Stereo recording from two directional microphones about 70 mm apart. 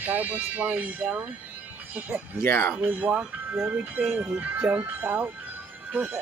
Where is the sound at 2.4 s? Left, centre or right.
Left.